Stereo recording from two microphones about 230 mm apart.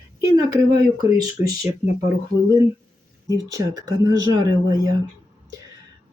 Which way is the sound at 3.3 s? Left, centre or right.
Centre.